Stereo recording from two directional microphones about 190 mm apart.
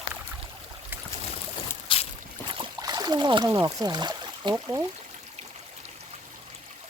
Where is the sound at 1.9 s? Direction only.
25° left (ahead or behind).